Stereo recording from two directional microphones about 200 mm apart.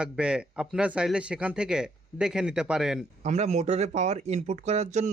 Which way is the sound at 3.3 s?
35° right (ahead or behind).